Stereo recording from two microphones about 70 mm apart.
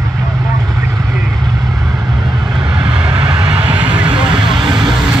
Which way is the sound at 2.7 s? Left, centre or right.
Centre.